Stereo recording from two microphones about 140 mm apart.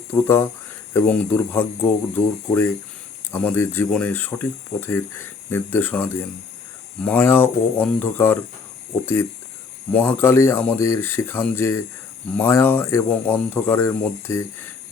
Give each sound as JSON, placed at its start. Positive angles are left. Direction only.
{"t": 0.1, "sound": "speech", "side_deg": 15}
{"t": 9.9, "sound": "speech", "side_deg": 10}